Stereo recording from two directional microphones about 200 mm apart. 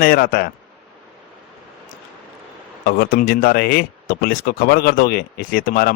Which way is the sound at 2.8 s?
50° left (ahead or behind).